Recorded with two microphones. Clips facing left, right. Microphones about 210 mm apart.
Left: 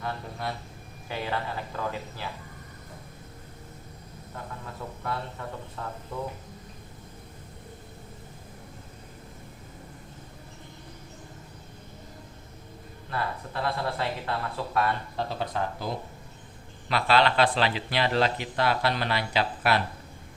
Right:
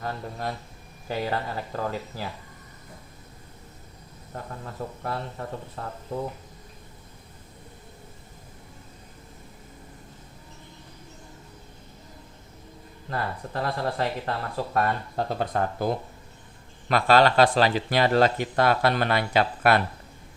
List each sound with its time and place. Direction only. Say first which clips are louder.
0.0 s speech: right 2 dB; 40° right (ahead or behind)
5.0 s speech: even; 35° right (ahead or behind)
13.1 s speech: right 1 dB; 40° right (ahead or behind)